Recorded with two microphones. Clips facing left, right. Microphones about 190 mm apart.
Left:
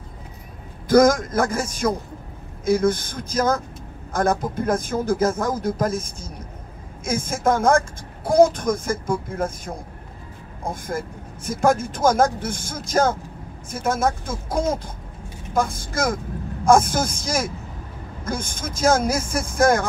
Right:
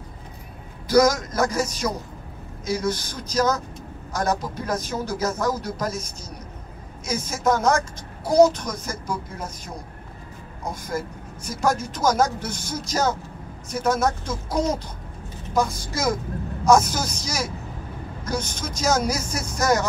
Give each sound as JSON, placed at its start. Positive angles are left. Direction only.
{"t": 0.8, "sound": "a woman's voice", "side_deg": 50}